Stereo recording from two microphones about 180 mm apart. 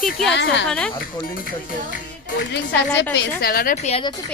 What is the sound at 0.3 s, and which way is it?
Speech, 75° left (ahead or behind).